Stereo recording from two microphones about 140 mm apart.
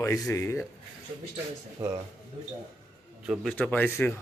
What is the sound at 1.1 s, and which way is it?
Speech, 40° right (ahead or behind).